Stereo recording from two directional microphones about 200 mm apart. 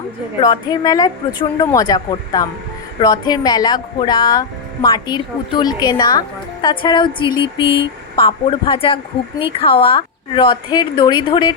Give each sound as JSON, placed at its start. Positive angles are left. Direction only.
{"t": 0.3, "sound": "speech", "side_deg": 20}